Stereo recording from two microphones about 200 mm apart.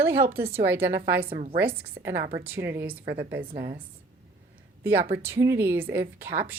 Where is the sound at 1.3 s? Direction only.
30° right (ahead or behind).